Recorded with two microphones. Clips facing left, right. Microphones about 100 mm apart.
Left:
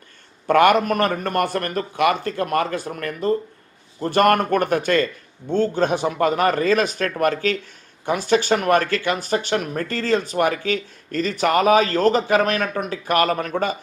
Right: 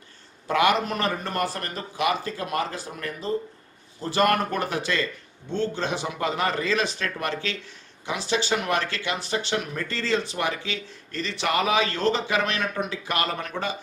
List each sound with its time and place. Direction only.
0.4 s a man's voice: 55° left (ahead or behind)